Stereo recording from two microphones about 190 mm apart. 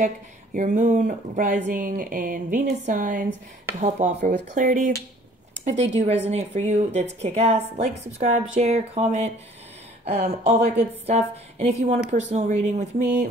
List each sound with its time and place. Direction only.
0.6 s speech: 40° right (ahead or behind)
3.8 s speech: 40° right (ahead or behind)